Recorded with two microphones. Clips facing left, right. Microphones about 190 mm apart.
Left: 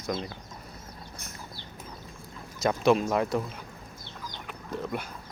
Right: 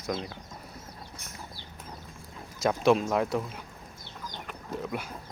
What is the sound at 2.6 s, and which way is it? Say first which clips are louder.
Speech: even; centre (ahead or behind).